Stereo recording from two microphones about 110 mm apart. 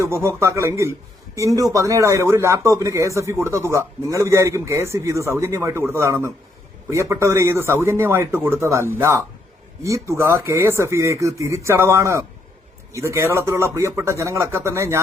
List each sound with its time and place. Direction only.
0.0 s speech: 25° right (ahead or behind)